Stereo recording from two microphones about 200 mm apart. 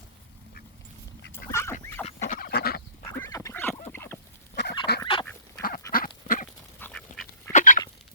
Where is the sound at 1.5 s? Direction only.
15° left (ahead or behind).